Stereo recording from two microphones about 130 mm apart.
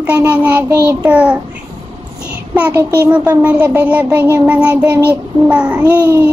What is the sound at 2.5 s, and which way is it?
A child's voice, 10° right (ahead or behind).